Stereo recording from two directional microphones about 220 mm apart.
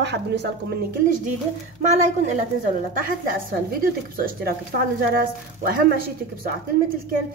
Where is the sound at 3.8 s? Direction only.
40° right (ahead or behind).